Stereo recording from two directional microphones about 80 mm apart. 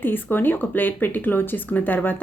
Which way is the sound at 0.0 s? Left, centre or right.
Left.